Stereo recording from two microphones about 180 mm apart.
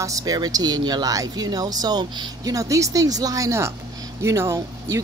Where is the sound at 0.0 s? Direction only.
20° right (ahead or behind).